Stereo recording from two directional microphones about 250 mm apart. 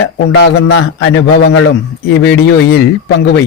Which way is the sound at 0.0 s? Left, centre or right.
Left.